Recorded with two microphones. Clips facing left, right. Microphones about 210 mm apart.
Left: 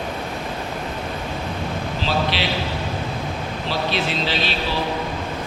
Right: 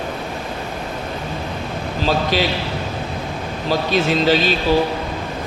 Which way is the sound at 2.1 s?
45° right (ahead or behind).